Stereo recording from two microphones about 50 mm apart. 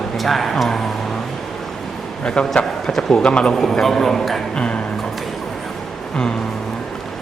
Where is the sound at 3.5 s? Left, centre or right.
Centre.